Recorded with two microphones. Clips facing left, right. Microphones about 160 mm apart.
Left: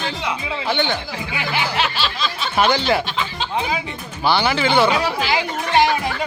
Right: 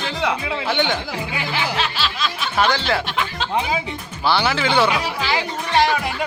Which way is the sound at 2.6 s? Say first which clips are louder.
Left 2 dB; 10° left (ahead or behind).